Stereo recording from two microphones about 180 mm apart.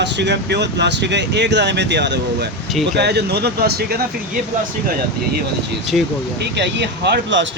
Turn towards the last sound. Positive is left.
turn(degrees=-80)